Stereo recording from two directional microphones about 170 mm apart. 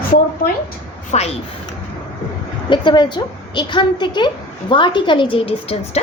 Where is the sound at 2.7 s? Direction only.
25° left (ahead or behind).